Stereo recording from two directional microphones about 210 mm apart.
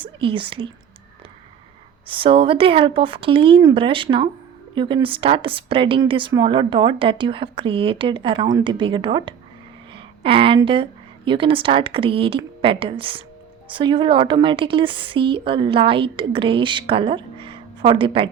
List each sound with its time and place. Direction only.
0.0 s speech: 25° right (ahead or behind)
2.0 s speech: 25° right (ahead or behind)